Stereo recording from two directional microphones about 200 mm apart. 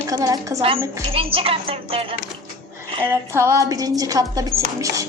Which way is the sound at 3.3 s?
15° right (ahead or behind).